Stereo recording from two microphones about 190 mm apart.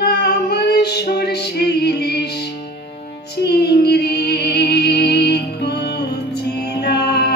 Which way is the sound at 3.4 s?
60° left (ahead or behind).